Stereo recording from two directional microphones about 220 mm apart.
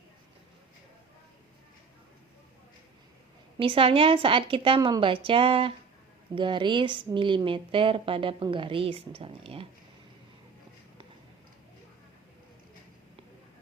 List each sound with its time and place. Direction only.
3.6 s a woman's voice: 25° right (ahead or behind)